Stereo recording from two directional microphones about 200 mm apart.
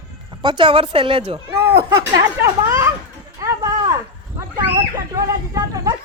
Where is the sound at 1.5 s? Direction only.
15° right (ahead or behind).